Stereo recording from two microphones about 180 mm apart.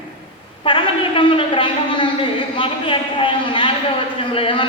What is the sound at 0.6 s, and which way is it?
A woman's voice, 30° left (ahead or behind).